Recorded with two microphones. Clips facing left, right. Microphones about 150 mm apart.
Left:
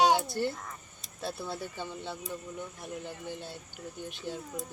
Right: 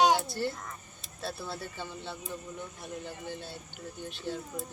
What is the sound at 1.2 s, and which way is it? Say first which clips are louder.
Speech: left 1 dB; 15° left (ahead or behind).